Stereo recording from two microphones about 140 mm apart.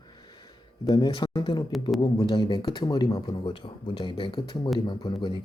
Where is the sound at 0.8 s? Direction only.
35° left (ahead or behind).